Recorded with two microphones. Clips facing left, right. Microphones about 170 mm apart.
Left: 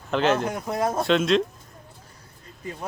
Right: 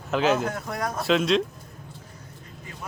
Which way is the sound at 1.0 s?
Centre (ahead or behind).